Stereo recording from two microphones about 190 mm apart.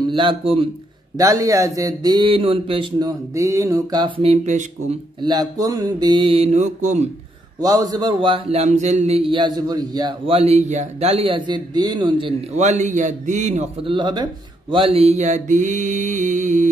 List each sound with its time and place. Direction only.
0.0 s a man's voice: 25° right (ahead or behind)
5.2 s a man's voice: 20° right (ahead or behind); by 7.1 s 40° right (ahead or behind)
7.6 s a man's voice: 20° right (ahead or behind); by 13.9 s 40° right (ahead or behind)
13.9 s speech: 25° right (ahead or behind); by 16.6 s 40° right (ahead or behind)